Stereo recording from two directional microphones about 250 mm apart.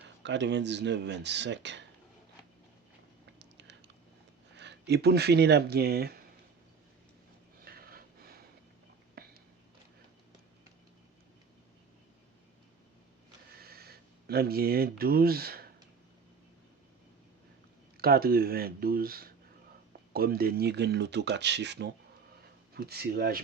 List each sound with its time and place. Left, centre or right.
0.2 s speech: right
3.3 s a sound: right
4.5 s speech: right
7.6 s a sound: right
9.2 s whispering: right
13.6 s speech: right
17.9 s speech: right